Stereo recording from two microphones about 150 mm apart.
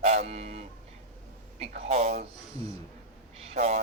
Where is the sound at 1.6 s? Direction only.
45° right (ahead or behind).